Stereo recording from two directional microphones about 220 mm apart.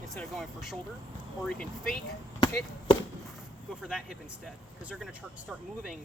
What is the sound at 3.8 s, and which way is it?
Speech, 5° right (ahead or behind).